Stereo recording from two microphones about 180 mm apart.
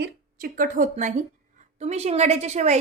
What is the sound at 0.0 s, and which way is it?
A woman's voice, 50° right (ahead or behind).